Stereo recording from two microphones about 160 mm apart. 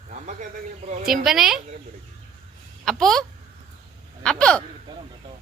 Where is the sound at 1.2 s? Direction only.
5° right (ahead or behind).